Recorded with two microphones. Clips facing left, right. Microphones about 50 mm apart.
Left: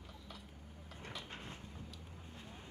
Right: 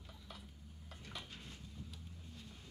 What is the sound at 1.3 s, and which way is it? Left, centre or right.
Vehicle, left.